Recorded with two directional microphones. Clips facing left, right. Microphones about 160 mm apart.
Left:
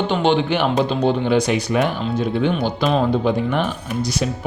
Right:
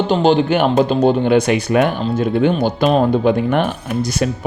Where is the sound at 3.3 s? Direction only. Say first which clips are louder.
Right 4 dB; 60° right (ahead or behind).